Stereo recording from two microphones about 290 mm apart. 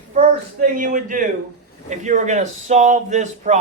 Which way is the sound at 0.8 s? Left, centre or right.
Right.